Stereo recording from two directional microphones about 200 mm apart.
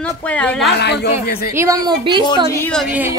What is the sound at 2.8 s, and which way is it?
Speech, 10° right (ahead or behind).